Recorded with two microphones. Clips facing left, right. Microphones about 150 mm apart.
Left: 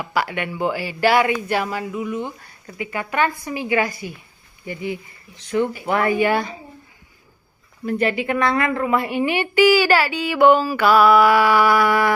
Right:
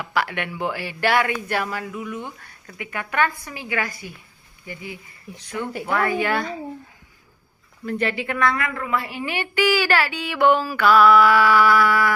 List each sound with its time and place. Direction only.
0.0 s a woman's voice: 5° left (ahead or behind)
7.9 s a woman's voice: 15° left (ahead or behind)